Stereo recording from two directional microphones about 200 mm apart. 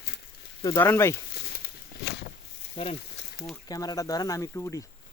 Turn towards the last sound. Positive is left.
turn(degrees=15)  # may be behind; listen again after turning